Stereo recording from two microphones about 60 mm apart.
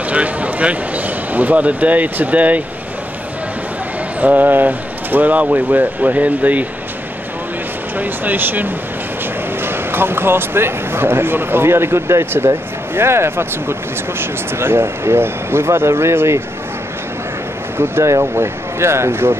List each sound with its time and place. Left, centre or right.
0.1 s speech: right
4.2 s speech: right
8.0 s speech: right
17.7 s speech: right